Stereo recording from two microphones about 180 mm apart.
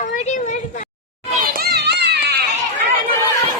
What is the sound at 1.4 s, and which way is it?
Children playing, 55° right (ahead or behind).